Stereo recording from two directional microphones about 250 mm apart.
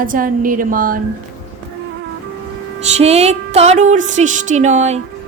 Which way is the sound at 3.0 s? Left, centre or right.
Right.